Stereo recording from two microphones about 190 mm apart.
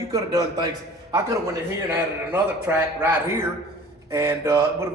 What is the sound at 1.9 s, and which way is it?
A man's voice, 10° right (ahead or behind).